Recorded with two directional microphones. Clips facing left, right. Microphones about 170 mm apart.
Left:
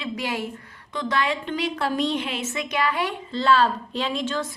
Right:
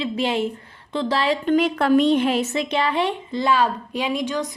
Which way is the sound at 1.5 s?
55° right (ahead or behind).